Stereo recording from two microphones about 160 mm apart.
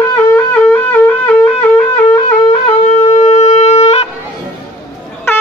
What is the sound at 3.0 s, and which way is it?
Shofar, 45° left (ahead or behind).